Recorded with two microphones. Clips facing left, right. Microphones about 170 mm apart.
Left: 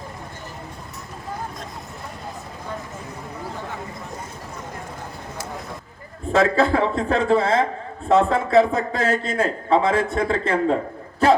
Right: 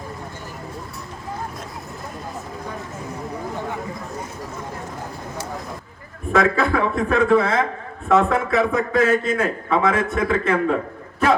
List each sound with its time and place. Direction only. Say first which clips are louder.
6.3 s a man's voice: left 1 dB; 30° left (ahead or behind)